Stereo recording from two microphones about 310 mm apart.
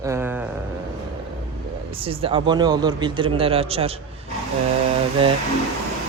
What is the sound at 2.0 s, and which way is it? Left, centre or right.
Speech, centre.